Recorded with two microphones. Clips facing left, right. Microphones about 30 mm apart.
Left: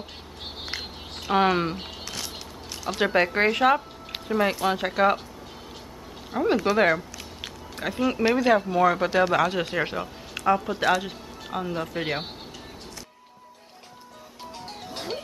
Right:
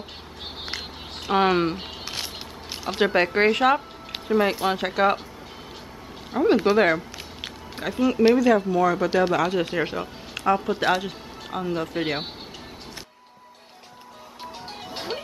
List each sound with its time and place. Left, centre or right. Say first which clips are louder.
1.2 s speech: right 1 dB; centre
2.0 s a sound: right 2 dB; right
3.0 s speech: right 2 dB; centre
6.3 s speech: right 4 dB; centre
6.8 s a sound: right 1 dB; centre
7.8 s speech: right 4 dB; centre
8.5 s speech: even; centre
9.4 s speech: right 1 dB; centre
14.4 s music: right 2 dB; centre